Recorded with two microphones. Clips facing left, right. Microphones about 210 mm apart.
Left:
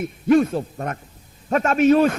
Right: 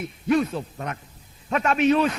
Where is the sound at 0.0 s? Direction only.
50° left (ahead or behind).